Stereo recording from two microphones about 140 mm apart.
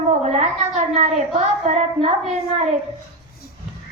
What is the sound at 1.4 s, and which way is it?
Child singing, 55° right (ahead or behind).